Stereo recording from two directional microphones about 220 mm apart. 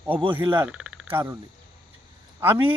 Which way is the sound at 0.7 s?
5° right (ahead or behind).